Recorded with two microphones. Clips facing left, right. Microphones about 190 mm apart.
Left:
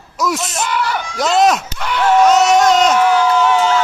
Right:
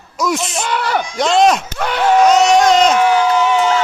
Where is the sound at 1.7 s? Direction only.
55° right (ahead or behind).